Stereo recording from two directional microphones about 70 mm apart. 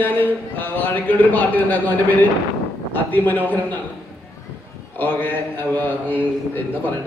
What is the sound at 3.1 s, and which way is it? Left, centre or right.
Speech, left.